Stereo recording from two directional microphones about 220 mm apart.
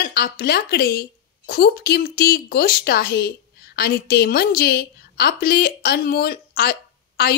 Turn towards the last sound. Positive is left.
turn(degrees=45)  # may be behind; listen again after turning